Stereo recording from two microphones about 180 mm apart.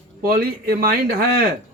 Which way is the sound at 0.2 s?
55° right (ahead or behind).